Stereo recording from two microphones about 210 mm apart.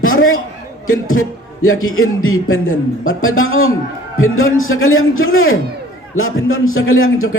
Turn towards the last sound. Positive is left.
turn(degrees=75)  # may be behind; listen again after turning